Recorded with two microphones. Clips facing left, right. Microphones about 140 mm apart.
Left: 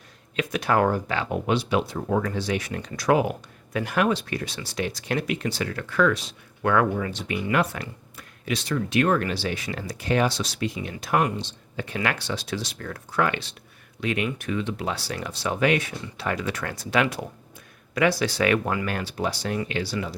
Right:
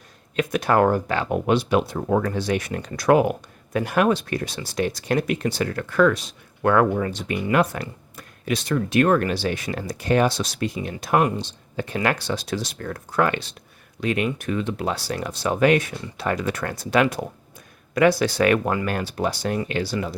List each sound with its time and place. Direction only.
0.3 s speech: 45° right (ahead or behind)